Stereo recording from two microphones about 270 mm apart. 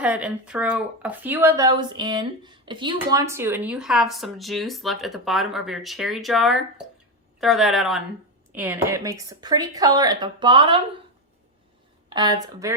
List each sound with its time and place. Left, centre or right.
0.0 s a woman's voice: centre
12.0 s a woman's voice: centre